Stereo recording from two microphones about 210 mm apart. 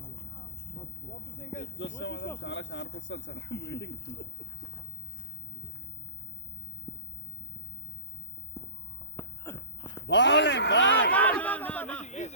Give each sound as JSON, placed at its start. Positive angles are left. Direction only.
{"t": 1.8, "sound": "speech", "side_deg": 60}
{"t": 8.6, "sound": "walk", "side_deg": 15}
{"t": 9.1, "sound": "a sound", "side_deg": 10}
{"t": 10.1, "sound": "a man's voice", "side_deg": 55}
{"t": 11.1, "sound": "a sound", "side_deg": 5}
{"t": 12.0, "sound": "speech", "side_deg": 35}